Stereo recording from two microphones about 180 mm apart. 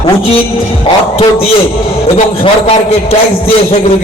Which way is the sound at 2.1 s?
35° left (ahead or behind).